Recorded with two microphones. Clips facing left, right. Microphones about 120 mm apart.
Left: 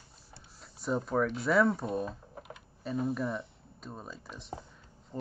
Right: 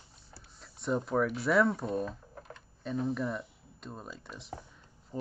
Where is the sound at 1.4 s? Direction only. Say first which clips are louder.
Left 1 dB; centre (ahead or behind).